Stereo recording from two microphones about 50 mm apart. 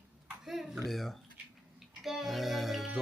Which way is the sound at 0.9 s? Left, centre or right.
Centre.